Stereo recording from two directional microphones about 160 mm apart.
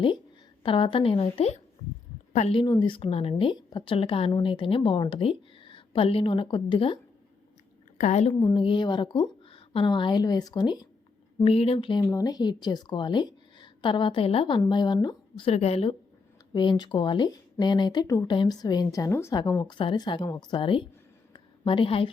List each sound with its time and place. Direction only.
0.6 s a woman's voice: 35° left (ahead or behind)
7.9 s a woman's voice: 50° left (ahead or behind)
8.3 s speech: 30° left (ahead or behind)
11.4 s a woman's voice: 40° left (ahead or behind)
15.4 s a woman's voice: 40° left (ahead or behind)
21.3 s a sound: 30° left (ahead or behind)